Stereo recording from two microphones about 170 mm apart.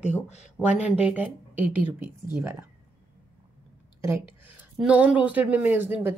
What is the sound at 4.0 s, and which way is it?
Speech, 15° right (ahead or behind).